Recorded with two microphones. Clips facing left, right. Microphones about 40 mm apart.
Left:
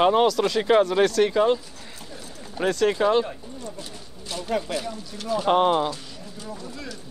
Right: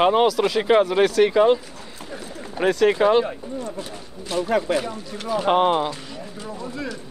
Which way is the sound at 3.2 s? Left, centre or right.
Right.